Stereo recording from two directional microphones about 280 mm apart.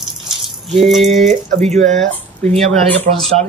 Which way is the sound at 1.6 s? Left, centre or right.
Right.